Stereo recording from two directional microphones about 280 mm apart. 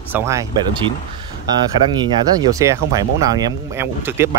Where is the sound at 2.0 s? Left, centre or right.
Centre.